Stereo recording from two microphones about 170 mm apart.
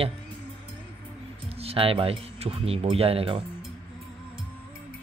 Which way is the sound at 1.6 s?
35° right (ahead or behind).